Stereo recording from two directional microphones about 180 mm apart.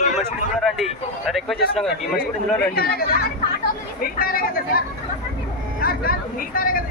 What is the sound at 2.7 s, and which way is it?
Speech, 60° left (ahead or behind).